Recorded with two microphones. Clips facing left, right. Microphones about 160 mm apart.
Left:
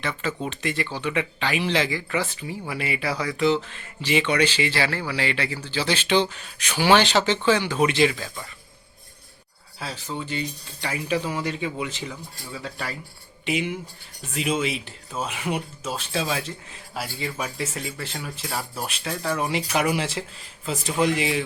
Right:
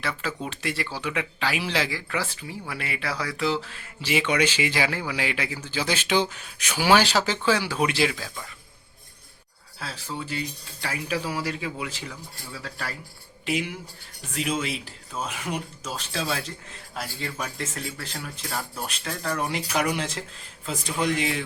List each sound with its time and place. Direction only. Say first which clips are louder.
0.0 s speech: left 2 dB; 5° right (ahead or behind)
9.8 s speech: left 2 dB; centre (ahead or behind)